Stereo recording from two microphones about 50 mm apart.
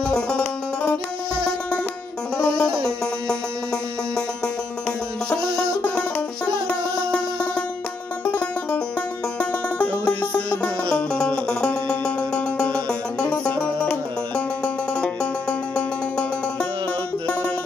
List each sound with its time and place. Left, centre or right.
0.0 s music: centre
2.3 s music: centre
5.8 s banjo: left
6.7 s music: left
8.3 s banjo: left
9.4 s music: left